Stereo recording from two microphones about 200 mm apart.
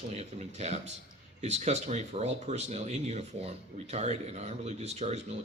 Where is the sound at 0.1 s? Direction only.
35° right (ahead or behind).